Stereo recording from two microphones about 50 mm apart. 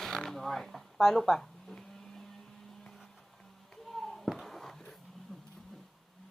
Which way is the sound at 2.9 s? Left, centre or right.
Centre.